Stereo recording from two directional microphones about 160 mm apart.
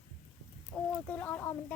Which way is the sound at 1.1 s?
10° left (ahead or behind).